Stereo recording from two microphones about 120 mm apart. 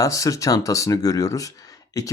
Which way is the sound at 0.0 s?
30° left (ahead or behind).